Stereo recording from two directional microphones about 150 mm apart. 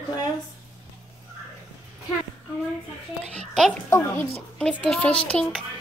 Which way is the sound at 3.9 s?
15° left (ahead or behind).